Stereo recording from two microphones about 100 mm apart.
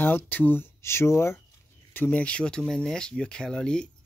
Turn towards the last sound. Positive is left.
turn(degrees=10)  # may be behind; listen again after turning